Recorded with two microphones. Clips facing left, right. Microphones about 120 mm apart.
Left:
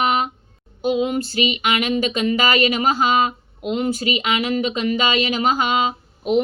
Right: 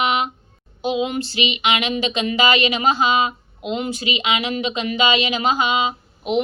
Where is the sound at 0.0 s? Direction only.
45° left (ahead or behind).